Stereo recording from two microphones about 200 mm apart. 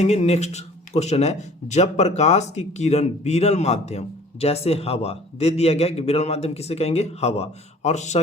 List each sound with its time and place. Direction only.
0.0 s speech: 35° left (ahead or behind)